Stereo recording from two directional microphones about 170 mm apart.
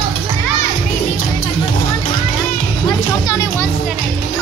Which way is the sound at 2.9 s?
20° left (ahead or behind).